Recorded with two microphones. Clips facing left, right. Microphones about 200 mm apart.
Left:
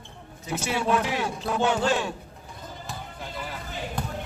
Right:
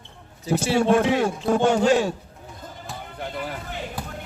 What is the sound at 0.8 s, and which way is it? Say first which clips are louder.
A man's voice: right 6 dB; 45° right (ahead or behind).